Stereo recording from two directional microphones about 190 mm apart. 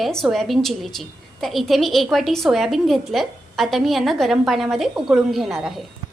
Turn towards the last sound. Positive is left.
turn(degrees=0)  # may be behind; listen again after turning